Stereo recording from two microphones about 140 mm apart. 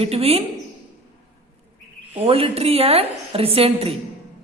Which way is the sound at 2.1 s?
45° right (ahead or behind).